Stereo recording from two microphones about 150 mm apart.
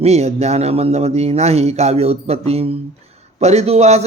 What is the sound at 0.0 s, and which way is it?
Speech, 45° right (ahead or behind).